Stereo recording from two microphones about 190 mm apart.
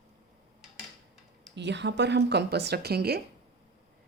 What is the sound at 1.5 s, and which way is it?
A woman's voice, 65° right (ahead or behind).